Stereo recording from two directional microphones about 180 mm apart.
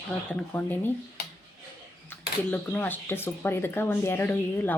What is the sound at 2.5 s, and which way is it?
Speech, 10° left (ahead or behind).